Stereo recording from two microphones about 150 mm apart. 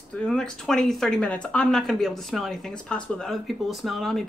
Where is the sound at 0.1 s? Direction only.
5° left (ahead or behind).